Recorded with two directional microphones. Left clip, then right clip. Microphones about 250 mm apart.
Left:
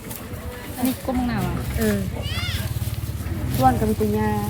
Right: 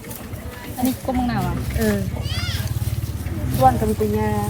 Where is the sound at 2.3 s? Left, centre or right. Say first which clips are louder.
Right 1 dB; centre.